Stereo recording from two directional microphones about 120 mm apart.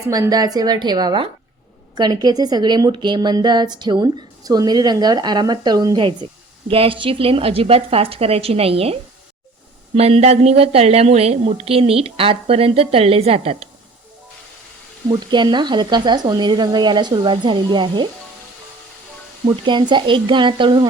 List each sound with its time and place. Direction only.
0.1 s a woman's voice: 30° right (ahead or behind)
6.7 s a woman's voice: 50° right (ahead or behind)
15.1 s a woman's voice: 40° right (ahead or behind)
19.6 s a woman's voice: 40° right (ahead or behind)